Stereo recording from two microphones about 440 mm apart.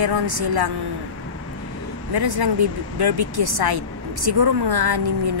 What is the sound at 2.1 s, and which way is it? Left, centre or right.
Speech, right.